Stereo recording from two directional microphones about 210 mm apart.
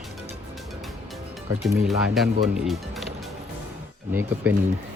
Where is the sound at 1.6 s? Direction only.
Centre (ahead or behind).